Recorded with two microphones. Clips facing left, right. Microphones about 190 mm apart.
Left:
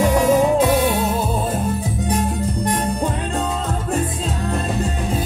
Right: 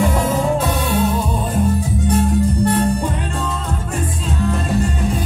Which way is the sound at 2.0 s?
15° left (ahead or behind).